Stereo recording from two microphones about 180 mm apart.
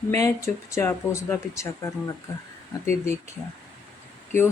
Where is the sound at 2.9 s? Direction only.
15° left (ahead or behind).